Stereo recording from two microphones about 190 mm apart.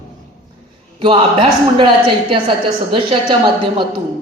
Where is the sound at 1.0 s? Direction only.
25° right (ahead or behind).